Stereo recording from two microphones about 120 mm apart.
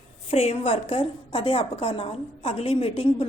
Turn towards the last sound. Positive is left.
turn(degrees=55)  # may be behind; listen again after turning